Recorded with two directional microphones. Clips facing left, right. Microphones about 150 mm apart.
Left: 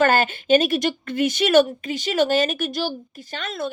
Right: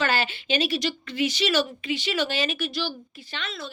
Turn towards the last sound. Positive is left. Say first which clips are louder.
# left 7 dB
turn(degrees=50)  # may be behind; listen again after turning